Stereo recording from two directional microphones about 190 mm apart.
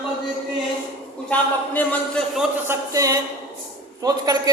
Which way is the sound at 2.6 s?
15° right (ahead or behind).